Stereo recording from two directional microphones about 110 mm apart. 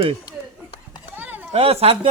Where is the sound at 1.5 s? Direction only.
60° right (ahead or behind).